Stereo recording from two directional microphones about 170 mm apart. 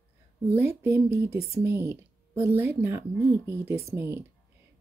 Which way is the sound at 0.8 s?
15° right (ahead or behind).